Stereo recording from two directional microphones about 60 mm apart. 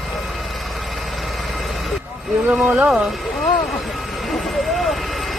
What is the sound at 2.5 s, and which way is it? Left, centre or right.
Speech, right.